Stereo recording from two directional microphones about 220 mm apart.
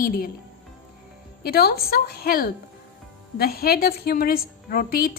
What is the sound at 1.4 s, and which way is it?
A woman's voice, 45° left (ahead or behind).